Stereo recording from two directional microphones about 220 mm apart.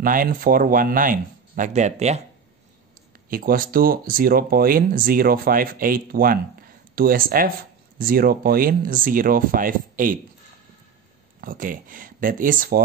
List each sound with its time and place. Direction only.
0.0 s speech: 40° right (ahead or behind)
3.3 s speech: 40° right (ahead or behind)
11.4 s speech: 40° right (ahead or behind)